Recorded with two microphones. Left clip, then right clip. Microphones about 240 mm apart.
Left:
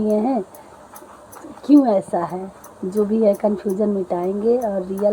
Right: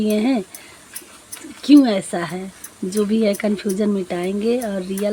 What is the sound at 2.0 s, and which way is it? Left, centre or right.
Speech, right.